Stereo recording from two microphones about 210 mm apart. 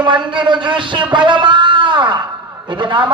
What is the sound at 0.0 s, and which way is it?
A man's voice, 25° right (ahead or behind).